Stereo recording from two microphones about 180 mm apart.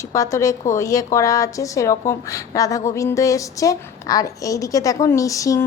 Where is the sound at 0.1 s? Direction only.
15° left (ahead or behind).